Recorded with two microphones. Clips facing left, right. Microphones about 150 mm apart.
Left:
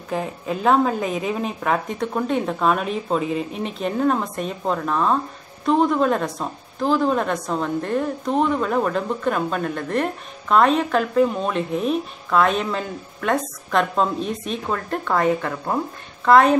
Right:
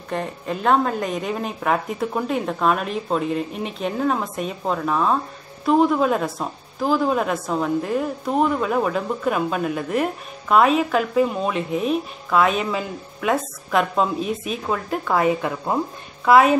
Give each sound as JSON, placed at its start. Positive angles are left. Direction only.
{"t": 0.1, "sound": "a woman's voice", "side_deg": 0}